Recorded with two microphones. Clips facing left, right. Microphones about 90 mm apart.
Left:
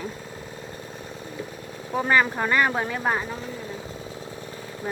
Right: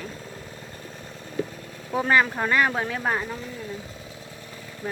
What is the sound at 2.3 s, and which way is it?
Speech, centre (ahead or behind).